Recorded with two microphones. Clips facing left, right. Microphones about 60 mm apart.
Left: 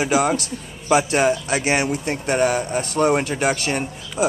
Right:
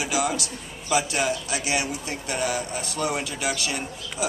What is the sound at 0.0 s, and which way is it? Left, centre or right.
A man's voice, left.